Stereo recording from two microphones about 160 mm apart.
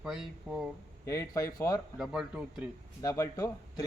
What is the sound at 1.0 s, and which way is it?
Speech, 20° left (ahead or behind).